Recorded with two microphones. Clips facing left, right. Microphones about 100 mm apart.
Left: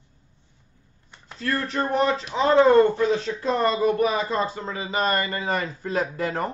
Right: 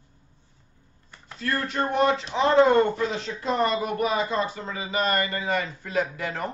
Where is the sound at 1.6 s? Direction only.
35° left (ahead or behind).